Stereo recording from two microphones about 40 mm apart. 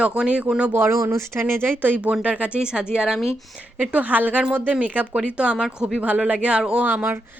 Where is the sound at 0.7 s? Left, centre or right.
Right.